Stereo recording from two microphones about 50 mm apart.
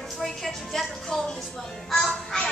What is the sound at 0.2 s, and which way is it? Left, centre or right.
A woman's voice, centre.